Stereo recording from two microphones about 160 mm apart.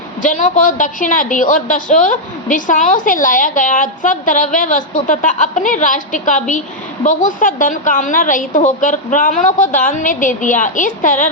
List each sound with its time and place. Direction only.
0.2 s a woman's voice: 55° left (ahead or behind)